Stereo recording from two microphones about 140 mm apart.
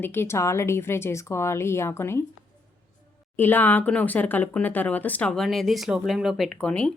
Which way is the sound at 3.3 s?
15° left (ahead or behind).